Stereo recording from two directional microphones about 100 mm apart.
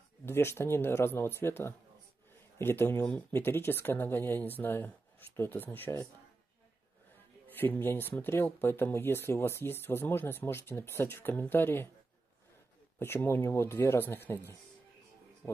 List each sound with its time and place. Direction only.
0.2 s speech: 25° left (ahead or behind)
3.1 s speech: 15° left (ahead or behind)
7.4 s speech: 20° left (ahead or behind)
13.0 s speech: 20° left (ahead or behind)